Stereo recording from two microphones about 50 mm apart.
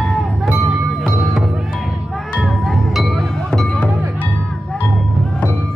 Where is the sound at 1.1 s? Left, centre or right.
Centre.